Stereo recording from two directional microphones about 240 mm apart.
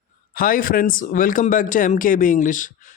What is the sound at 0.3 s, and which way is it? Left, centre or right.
Speech, left.